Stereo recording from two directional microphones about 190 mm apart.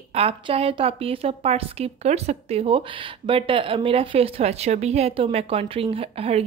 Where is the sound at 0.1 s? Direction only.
30° right (ahead or behind).